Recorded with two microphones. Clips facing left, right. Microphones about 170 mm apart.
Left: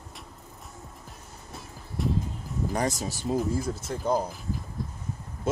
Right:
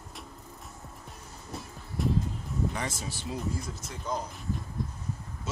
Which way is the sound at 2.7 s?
40° left (ahead or behind).